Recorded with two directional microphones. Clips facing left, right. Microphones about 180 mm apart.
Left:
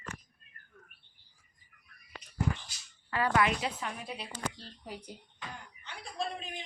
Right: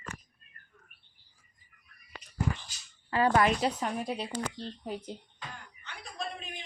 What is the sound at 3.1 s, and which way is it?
Speech, 30° right (ahead or behind).